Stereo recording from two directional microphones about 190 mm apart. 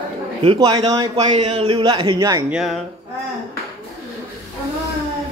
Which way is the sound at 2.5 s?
Centre (ahead or behind).